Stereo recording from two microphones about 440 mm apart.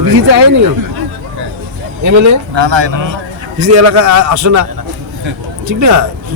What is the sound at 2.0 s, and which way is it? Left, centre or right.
Speech, right.